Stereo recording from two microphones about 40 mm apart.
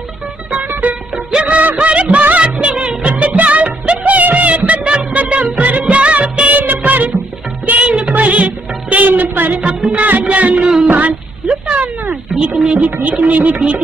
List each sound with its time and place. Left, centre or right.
0.8 s music: right
1.8 s music: right
6.5 s music of bollywood: right
7.6 s music: right
10.2 s music: right
10.9 s a sound: right
12.4 s speech: right
12.8 s music: right
13.6 s music: right